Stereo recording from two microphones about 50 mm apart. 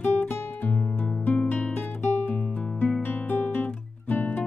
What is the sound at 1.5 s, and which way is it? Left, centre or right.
Guitar, left.